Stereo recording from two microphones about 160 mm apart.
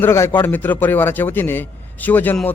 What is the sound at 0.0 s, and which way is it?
A man's voice, 15° left (ahead or behind).